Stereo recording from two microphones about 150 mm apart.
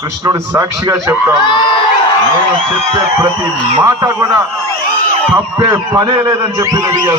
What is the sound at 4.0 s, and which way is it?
Speech, 20° right (ahead or behind).